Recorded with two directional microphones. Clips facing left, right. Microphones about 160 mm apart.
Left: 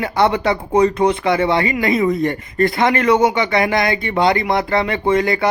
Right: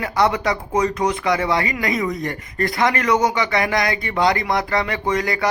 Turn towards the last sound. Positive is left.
turn(degrees=25)  # may be behind; listen again after turning